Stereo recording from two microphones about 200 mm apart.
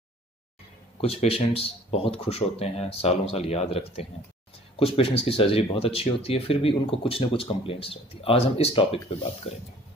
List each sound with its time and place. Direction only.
1.0 s speech: 30° left (ahead or behind)